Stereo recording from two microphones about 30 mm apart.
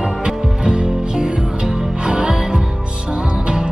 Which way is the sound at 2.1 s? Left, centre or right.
Right.